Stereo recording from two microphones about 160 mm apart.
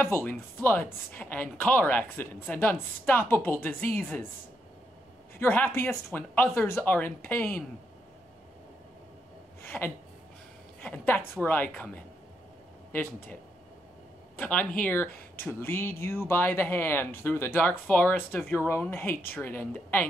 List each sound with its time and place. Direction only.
0.0 s speech: 10° left (ahead or behind)
5.4 s speech: 15° left (ahead or behind)
9.6 s a sound: 15° left (ahead or behind)
10.8 s speech: 10° left (ahead or behind)
15.0 s a sound: 70° left (ahead or behind)
15.4 s speech: 15° left (ahead or behind)